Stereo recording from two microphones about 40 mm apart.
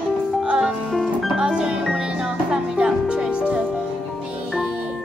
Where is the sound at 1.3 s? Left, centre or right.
Right.